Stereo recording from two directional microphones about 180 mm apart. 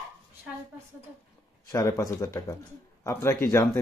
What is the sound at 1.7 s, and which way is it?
Speech, 20° left (ahead or behind).